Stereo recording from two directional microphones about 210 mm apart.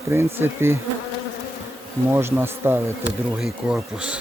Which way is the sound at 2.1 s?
10° right (ahead or behind).